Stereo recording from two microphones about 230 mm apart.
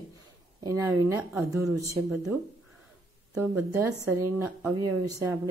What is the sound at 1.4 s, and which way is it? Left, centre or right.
Speech, centre.